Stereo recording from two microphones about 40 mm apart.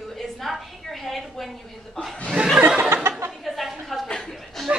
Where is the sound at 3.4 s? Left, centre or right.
Centre.